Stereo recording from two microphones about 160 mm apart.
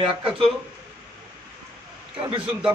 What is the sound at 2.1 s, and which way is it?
Speech, 35° right (ahead or behind).